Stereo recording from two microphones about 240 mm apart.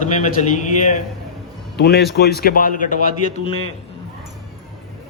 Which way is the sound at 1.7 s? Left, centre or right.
Left.